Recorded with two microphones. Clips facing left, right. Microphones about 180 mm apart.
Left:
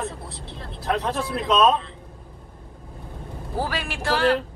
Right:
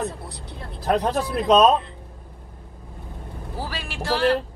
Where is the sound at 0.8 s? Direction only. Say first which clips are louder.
Right 3 dB; 40° right (ahead or behind).